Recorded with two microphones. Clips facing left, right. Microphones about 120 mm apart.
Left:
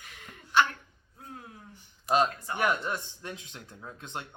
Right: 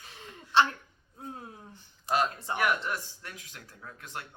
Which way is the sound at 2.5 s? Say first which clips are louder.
Left 1 dB; 25° left (ahead or behind).